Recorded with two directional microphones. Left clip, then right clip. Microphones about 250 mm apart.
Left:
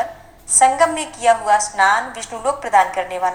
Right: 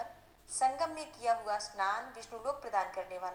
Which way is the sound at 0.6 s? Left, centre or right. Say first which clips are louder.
Left 18 dB; left.